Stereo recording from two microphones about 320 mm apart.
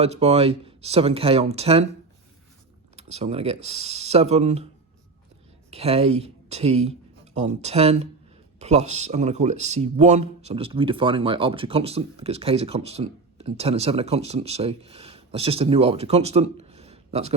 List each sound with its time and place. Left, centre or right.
0.0 s speech: centre
2.9 s speech: centre
5.7 s speech: centre